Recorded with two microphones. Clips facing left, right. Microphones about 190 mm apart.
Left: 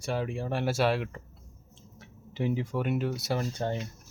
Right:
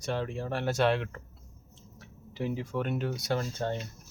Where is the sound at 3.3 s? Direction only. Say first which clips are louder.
Left 1 dB; 15° left (ahead or behind).